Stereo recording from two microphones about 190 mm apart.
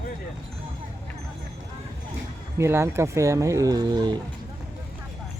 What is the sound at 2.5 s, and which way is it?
Speech, 15° right (ahead or behind).